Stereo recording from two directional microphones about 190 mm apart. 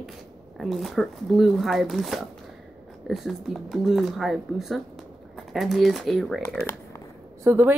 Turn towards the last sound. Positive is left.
turn(degrees=-10)  # may be behind; listen again after turning